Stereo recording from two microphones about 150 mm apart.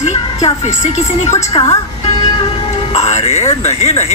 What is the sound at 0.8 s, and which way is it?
Speech, 50° left (ahead or behind).